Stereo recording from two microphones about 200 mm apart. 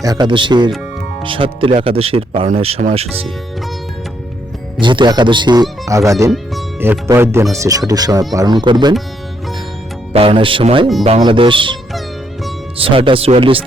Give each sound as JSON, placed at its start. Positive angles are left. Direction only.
{"t": 0.0, "sound": "speech", "side_deg": -20}
{"t": 4.8, "sound": "speech", "side_deg": -25}
{"t": 10.1, "sound": "speech", "side_deg": -30}